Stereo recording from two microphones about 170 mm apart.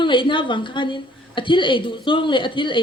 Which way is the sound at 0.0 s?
30° left (ahead or behind).